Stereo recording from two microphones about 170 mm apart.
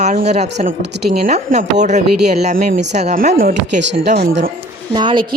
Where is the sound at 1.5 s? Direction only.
55° right (ahead or behind).